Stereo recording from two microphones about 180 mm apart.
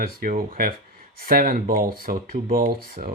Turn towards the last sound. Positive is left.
turn(degrees=-55)  # may be behind; listen again after turning